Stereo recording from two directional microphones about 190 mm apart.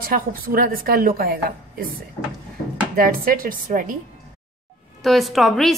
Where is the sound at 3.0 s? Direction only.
50° right (ahead or behind).